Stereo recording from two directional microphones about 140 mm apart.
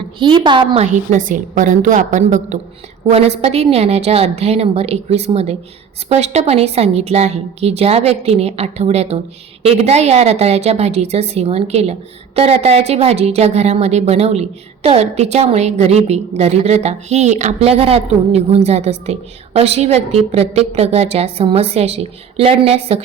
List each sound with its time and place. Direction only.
0.2 s a woman's voice: 35° right (ahead or behind)
0.8 s a woman's voice: 65° right (ahead or behind)
3.1 s a woman's voice: 45° right (ahead or behind)